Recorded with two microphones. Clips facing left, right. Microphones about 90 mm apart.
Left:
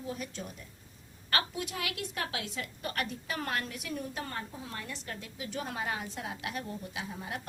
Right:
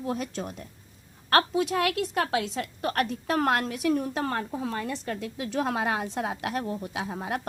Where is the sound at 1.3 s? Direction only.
65° right (ahead or behind).